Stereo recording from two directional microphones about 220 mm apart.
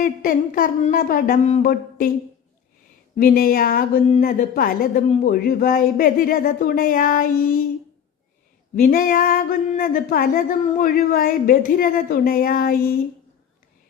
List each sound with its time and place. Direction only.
0.0 s speech: 40° left (ahead or behind)
3.2 s speech: 40° left (ahead or behind)
8.7 s speech: 40° left (ahead or behind)